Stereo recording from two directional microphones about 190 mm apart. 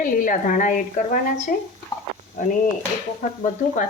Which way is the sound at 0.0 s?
45° left (ahead or behind).